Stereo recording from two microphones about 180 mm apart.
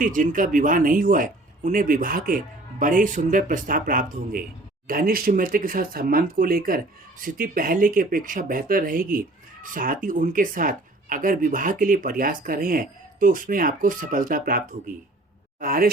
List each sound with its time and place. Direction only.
0.0 s speech: 45° right (ahead or behind)